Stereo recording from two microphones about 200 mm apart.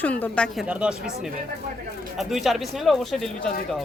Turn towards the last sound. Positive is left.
turn(degrees=0)  # may be behind; listen again after turning